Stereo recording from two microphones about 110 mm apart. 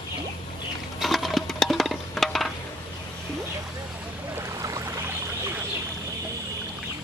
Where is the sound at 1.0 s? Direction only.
Centre (ahead or behind).